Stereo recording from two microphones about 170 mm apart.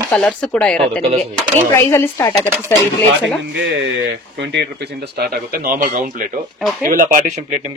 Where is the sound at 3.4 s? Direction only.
90° right.